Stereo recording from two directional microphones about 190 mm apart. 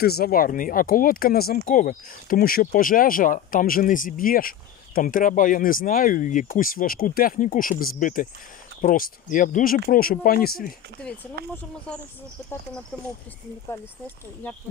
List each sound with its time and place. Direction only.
0.0 s speech: 55° left (ahead or behind)
12.9 s speech: 5° left (ahead or behind)